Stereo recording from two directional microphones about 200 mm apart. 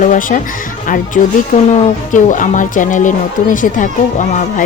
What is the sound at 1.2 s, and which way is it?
Speech, 30° left (ahead or behind).